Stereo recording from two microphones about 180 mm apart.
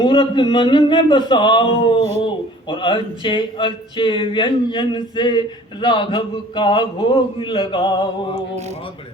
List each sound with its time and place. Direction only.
0.0 s speech: 25° left (ahead or behind)